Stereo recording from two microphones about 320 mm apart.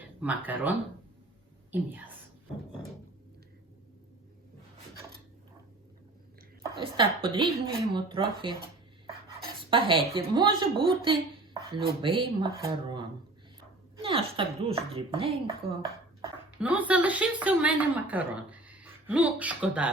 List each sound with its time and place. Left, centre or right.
0.2 s a woman's voice: centre
6.7 s speech: centre
9.6 s a woman's voice: centre
16.6 s a woman's voice: centre